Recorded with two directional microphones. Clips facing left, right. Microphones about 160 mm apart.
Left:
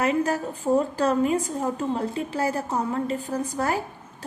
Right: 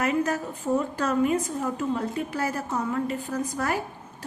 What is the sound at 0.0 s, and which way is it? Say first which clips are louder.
A woman's voice: left 2 dB; 30° left (ahead or behind).